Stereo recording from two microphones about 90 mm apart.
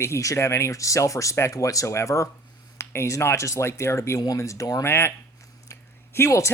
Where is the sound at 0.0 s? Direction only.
35° left (ahead or behind).